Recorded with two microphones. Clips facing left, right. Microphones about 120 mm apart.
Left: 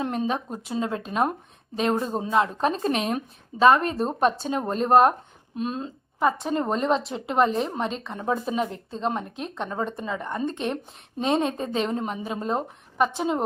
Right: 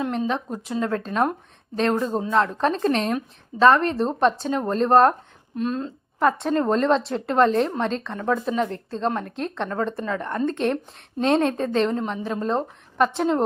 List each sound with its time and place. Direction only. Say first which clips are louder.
0.0 s speech: right 2 dB; 25° left (ahead or behind)
6.1 s a woman's voice: right 3 dB; centre (ahead or behind)
8.2 s a woman's voice: right 2 dB; 15° left (ahead or behind)